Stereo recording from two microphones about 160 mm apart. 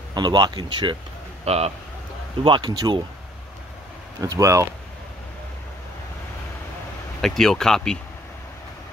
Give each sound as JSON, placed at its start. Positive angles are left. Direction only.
{"t": 0.1, "sound": "speech", "side_deg": -30}
{"t": 1.4, "sound": "speech", "side_deg": -40}
{"t": 2.4, "sound": "speech", "side_deg": -30}
{"t": 4.2, "sound": "speech", "side_deg": -20}
{"t": 7.2, "sound": "speech", "side_deg": 5}